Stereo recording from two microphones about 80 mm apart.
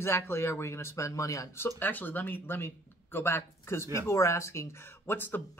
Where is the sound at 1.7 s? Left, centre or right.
Left.